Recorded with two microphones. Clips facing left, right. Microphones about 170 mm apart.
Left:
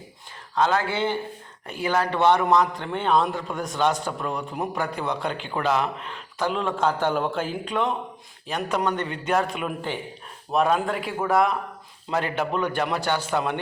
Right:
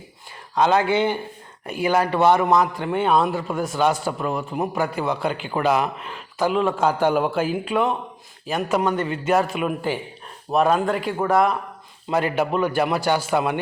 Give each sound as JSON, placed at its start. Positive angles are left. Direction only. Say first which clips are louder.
{"t": 0.5, "sound": "a man's voice", "louder": "right 5 dB", "side_deg": -20}